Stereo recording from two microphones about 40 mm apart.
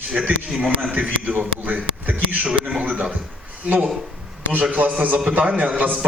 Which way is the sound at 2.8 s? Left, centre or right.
Right.